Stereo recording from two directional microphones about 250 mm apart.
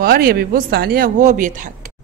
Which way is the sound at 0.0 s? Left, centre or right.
Right.